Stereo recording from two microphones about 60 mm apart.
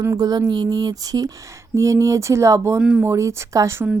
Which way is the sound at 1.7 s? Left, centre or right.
Right.